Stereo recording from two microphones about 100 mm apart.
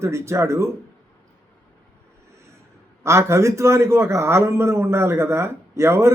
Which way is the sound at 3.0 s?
30° right (ahead or behind).